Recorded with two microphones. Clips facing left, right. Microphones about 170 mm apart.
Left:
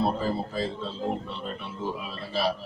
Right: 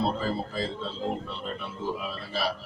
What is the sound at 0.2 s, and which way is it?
Speech, 15° left (ahead or behind).